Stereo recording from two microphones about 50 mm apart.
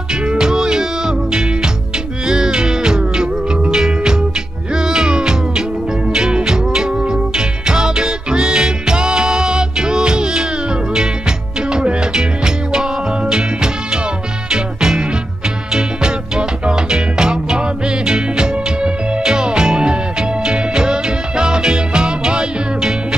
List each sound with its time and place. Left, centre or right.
0.1 s music: centre
14.8 s music: centre